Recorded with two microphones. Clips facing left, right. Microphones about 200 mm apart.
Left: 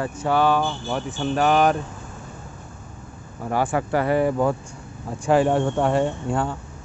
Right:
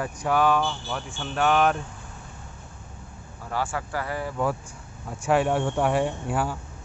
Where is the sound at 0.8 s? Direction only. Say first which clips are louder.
Left 7 dB; 45° left (ahead or behind).